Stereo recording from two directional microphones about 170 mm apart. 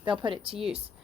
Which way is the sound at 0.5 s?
Centre (ahead or behind).